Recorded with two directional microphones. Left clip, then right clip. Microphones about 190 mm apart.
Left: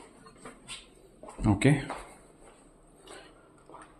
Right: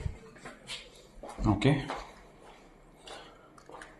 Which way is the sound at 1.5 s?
45° left (ahead or behind).